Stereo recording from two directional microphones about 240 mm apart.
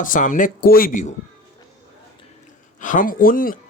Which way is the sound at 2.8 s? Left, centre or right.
Left.